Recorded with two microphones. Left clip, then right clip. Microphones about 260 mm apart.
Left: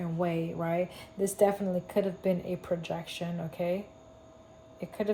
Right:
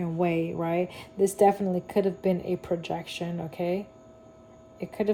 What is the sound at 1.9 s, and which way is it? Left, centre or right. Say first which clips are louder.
Speech: right 4 dB; right.